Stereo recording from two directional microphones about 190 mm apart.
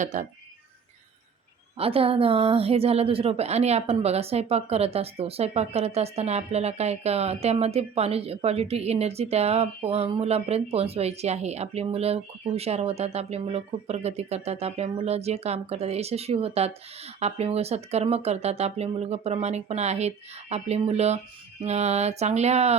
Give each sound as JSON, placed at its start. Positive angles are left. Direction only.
{"t": 0.0, "sound": "a woman's voice", "side_deg": -40}
{"t": 1.8, "sound": "a woman's voice", "side_deg": -30}